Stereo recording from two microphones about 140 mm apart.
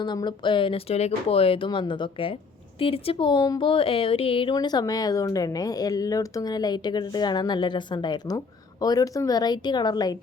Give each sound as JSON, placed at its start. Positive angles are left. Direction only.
{"t": 0.0, "sound": "speech", "side_deg": 30}
{"t": 4.5, "sound": "speech", "side_deg": 30}